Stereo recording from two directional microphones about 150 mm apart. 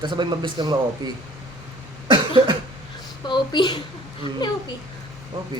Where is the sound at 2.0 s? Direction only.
30° right (ahead or behind).